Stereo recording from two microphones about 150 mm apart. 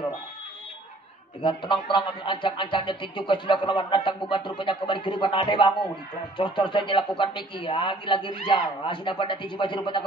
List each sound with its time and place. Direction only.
1.4 s speech: 35° left (ahead or behind)